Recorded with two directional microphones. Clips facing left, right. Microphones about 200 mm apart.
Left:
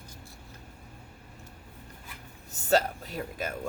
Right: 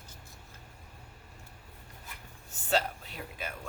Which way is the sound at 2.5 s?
40° left (ahead or behind).